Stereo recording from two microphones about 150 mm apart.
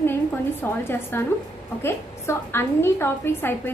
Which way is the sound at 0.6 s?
10° left (ahead or behind).